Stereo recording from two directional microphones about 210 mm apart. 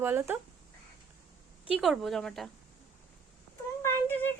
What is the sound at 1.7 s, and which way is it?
Speech, centre (ahead or behind).